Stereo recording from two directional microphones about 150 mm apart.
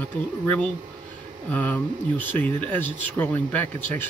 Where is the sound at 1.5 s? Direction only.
10° left (ahead or behind).